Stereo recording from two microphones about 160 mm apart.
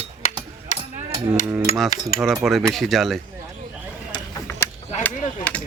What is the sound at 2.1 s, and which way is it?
Cutlery, 65° left (ahead or behind).